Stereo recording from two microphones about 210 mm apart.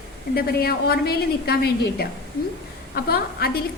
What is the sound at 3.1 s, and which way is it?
Speech, 45° left (ahead or behind).